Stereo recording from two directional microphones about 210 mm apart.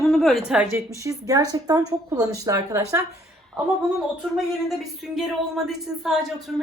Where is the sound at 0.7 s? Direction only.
15° right (ahead or behind).